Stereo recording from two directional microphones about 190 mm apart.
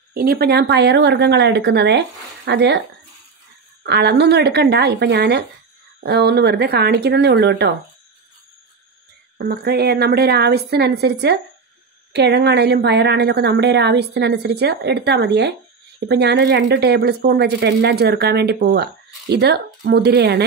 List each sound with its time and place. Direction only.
0.1 s a woman's voice: 50° right (ahead or behind)
3.8 s a woman's voice: 60° right (ahead or behind)
9.4 s a woman's voice: 55° right (ahead or behind)